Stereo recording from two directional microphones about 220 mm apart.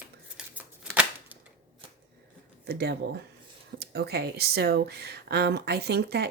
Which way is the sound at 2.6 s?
45° right (ahead or behind).